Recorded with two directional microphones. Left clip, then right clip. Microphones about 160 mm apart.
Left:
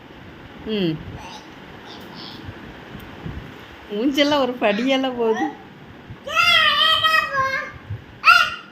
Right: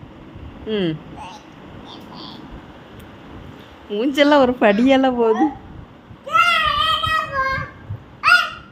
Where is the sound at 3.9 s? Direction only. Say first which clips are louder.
Right 4 dB; 50° right (ahead or behind).